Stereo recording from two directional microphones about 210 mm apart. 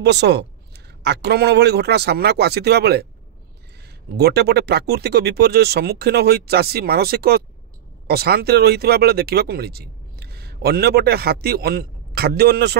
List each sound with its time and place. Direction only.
0.0 s speech: 55° right (ahead or behind)
4.2 s speech: 50° right (ahead or behind)